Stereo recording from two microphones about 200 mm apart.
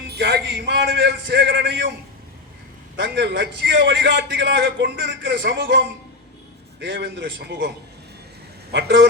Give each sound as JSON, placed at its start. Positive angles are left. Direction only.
{"t": 0.1, "sound": "a man's voice", "side_deg": -55}
{"t": 3.0, "sound": "a man's voice", "side_deg": -60}
{"t": 8.7, "sound": "a man's voice", "side_deg": -55}